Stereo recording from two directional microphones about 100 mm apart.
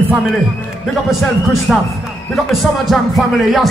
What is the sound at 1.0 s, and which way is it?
Speech, centre (ahead or behind).